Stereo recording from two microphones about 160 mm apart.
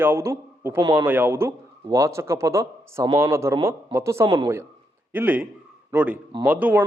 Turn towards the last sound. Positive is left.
turn(degrees=-10)  # may be behind; listen again after turning